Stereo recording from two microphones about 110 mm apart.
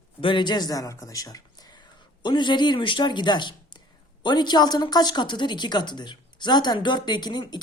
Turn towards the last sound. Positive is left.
turn(degrees=40)  # may be behind; listen again after turning